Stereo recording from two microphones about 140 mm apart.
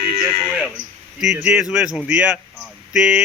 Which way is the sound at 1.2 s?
5° right (ahead or behind).